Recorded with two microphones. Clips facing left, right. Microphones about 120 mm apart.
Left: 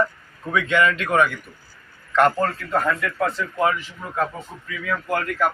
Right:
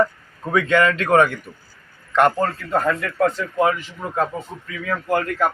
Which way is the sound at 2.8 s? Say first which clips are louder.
Right 5 dB; 30° right (ahead or behind).